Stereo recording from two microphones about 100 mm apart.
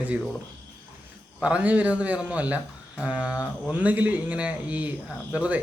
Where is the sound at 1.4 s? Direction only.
15° right (ahead or behind).